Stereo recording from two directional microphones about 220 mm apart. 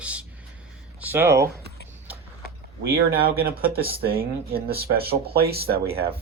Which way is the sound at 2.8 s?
45° right (ahead or behind).